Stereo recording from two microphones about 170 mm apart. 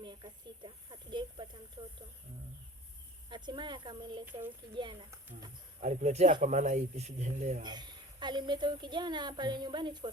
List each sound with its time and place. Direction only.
0.0 s speech: 30° right (ahead or behind)
3.2 s a woman's voice: 25° right (ahead or behind)
5.8 s speech: 45° right (ahead or behind)
7.6 s a woman's voice: 25° right (ahead or behind)